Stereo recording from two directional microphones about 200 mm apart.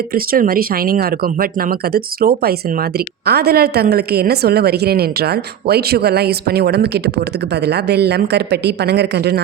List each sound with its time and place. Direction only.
0.1 s a woman's voice: 45° right (ahead or behind)